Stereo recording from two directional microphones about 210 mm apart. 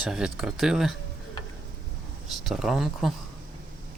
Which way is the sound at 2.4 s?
Centre (ahead or behind).